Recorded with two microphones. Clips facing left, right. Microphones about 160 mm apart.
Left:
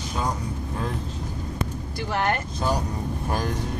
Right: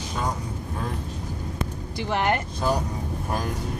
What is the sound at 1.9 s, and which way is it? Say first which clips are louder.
Speech: right 2 dB; 20° right (ahead or behind).